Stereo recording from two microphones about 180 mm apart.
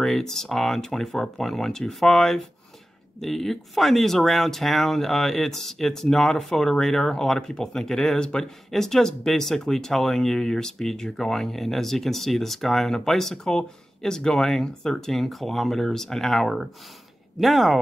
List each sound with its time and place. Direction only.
0.0 s speech: centre (ahead or behind)